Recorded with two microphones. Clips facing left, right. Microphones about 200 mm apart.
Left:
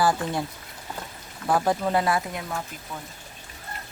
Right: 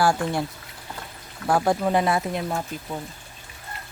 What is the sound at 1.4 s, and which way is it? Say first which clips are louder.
Chicken: right 2 dB; 10° right (ahead or behind).